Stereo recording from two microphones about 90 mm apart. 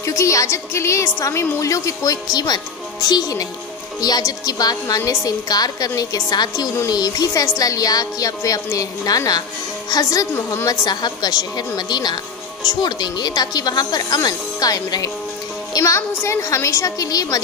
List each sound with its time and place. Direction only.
0.0 s a woman's voice: 35° left (ahead or behind)